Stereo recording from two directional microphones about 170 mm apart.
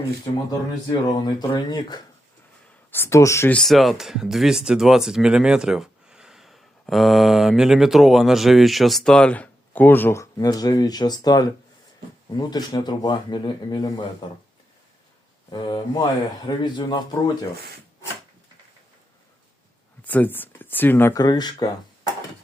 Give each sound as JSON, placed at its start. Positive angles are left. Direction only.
{"t": 0.9, "sound": "speech", "side_deg": 25}
{"t": 3.6, "sound": "speech", "side_deg": 0}
{"t": 15.4, "sound": "speech", "side_deg": 25}
{"t": 20.1, "sound": "speech", "side_deg": 10}